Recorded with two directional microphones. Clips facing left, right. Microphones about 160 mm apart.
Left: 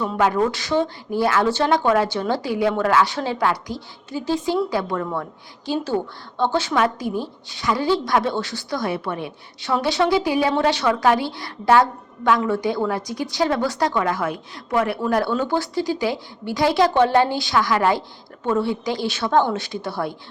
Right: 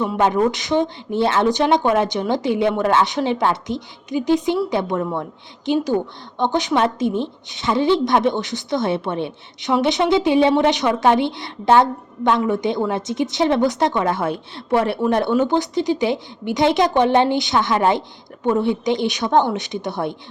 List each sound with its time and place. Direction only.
0.0 s a woman's voice: 20° right (ahead or behind)